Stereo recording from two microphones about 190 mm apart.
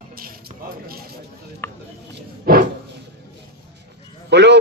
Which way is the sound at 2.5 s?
55° right (ahead or behind).